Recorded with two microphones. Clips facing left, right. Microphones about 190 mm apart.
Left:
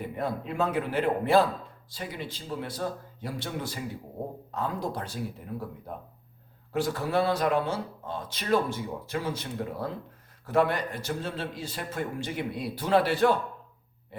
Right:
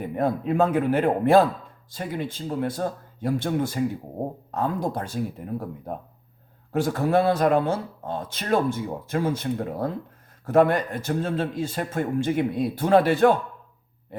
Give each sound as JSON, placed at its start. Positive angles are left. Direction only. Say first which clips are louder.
{"t": 0.2, "sound": "speech", "louder": "right 8 dB", "side_deg": -50}